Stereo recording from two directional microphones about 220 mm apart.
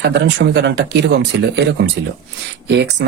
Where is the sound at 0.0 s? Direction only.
50° right (ahead or behind).